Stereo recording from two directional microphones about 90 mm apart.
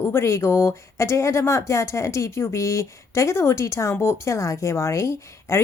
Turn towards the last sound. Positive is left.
turn(degrees=30)  # may be behind; listen again after turning